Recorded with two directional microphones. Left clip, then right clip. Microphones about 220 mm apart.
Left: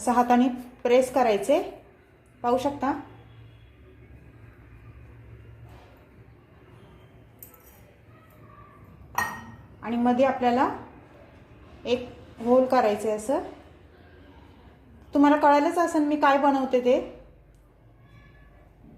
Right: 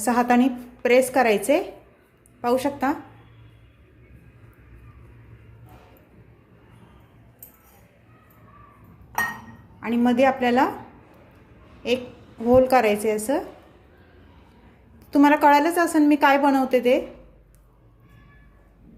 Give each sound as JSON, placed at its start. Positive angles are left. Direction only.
{"t": 0.0, "sound": "a woman's voice", "side_deg": -20}
{"t": 2.4, "sound": "a woman's voice", "side_deg": -20}
{"t": 9.8, "sound": "a woman's voice", "side_deg": -20}
{"t": 12.5, "sound": "a woman's voice", "side_deg": -20}
{"t": 15.1, "sound": "a woman's voice", "side_deg": -20}